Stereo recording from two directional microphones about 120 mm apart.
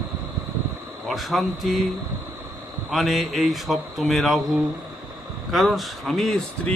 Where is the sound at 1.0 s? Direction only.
Centre (ahead or behind).